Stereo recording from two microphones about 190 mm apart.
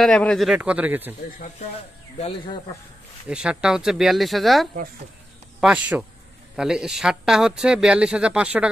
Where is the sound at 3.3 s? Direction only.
5° right (ahead or behind).